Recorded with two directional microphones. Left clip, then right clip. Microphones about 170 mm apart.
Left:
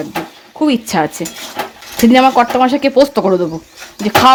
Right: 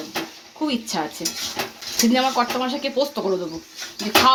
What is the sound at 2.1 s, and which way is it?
Speech, 75° left (ahead or behind).